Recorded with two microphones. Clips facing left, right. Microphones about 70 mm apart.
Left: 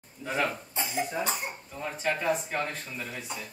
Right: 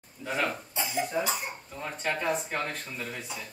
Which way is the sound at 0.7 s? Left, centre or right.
Left.